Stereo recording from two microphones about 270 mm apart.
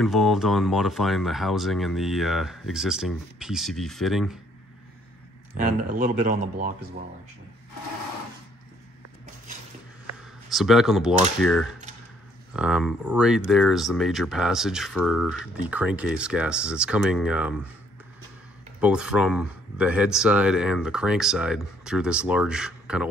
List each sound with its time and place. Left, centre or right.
0.0 s speech: centre
5.6 s speech: right
10.5 s speech: centre
18.8 s speech: centre